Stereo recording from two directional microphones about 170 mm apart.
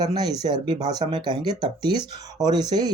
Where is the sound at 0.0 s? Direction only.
25° right (ahead or behind).